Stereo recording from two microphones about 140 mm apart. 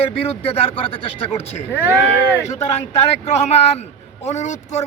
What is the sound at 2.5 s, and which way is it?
Speech, 50° left (ahead or behind).